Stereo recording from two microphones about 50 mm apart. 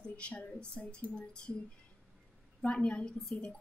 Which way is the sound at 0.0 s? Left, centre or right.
Left.